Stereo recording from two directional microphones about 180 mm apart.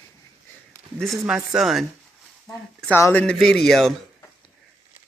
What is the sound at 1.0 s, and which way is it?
Speech, centre (ahead or behind).